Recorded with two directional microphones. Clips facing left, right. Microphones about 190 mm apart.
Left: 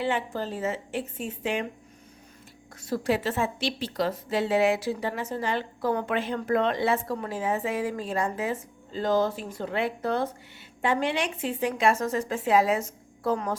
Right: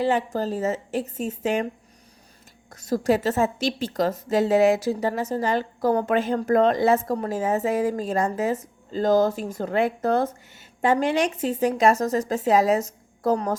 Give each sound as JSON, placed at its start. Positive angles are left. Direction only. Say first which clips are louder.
{"t": 0.0, "sound": "a woman's voice", "louder": "right 5 dB", "side_deg": -40}
{"t": 2.8, "sound": "a woman's voice", "louder": "right 5 dB", "side_deg": -40}